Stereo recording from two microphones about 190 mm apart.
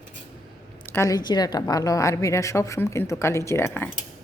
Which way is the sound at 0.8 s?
15° left (ahead or behind).